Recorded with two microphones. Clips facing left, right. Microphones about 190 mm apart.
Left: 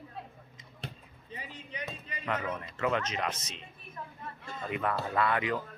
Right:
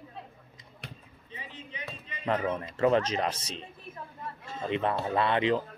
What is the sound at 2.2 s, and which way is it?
A man's voice, 35° right (ahead or behind).